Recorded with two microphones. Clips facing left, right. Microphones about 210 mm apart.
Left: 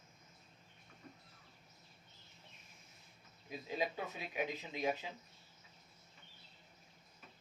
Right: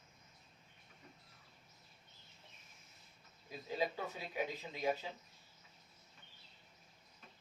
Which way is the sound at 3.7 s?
15° left (ahead or behind).